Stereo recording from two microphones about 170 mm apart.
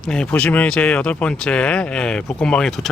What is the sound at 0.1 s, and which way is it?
Speech, 5° left (ahead or behind).